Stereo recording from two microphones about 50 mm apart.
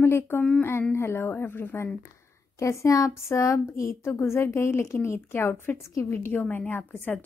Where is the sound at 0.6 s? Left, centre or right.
Left.